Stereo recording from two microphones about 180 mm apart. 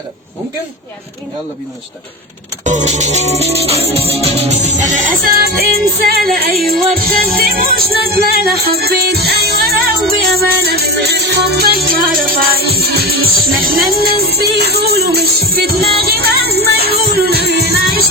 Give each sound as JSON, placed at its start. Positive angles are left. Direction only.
{"t": 2.6, "sound": "music", "side_deg": -40}